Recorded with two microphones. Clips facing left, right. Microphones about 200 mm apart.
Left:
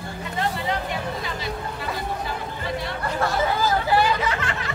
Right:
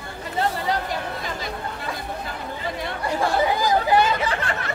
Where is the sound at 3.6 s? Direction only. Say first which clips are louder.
Right 2 dB; 15° right (ahead or behind).